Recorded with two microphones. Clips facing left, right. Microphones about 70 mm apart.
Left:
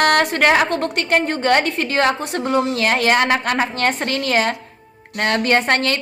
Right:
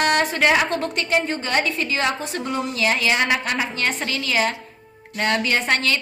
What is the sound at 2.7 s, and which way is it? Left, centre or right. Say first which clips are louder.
A woman's voice: left 4 dB; left.